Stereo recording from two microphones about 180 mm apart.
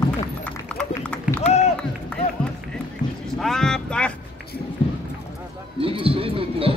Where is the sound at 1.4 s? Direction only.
35° left (ahead or behind).